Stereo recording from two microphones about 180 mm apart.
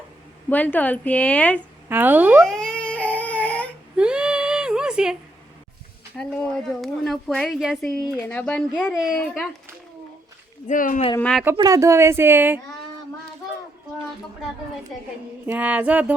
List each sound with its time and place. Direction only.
0.5 s a woman's voice: 10° left (ahead or behind)
1.9 s speech: 10° right (ahead or behind)
2.4 s baby cry: 5° left (ahead or behind)
3.9 s a sound: 5° right (ahead or behind)
6.1 s a woman's voice: centre (ahead or behind)
10.7 s speech: 45° left (ahead or behind)
11.2 s speech: centre (ahead or behind)
11.5 s speech: 20° right (ahead or behind)
15.4 s speech: 10° right (ahead or behind)